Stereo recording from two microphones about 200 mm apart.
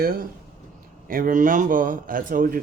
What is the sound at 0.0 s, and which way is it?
Speech, 50° right (ahead or behind).